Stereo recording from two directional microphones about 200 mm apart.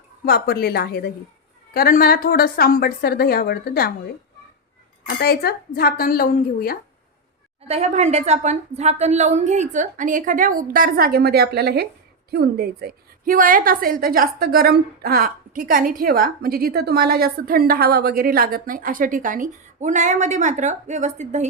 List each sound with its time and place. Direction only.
0.3 s a woman's voice: 50° left (ahead or behind)
7.7 s a woman's voice: 35° right (ahead or behind)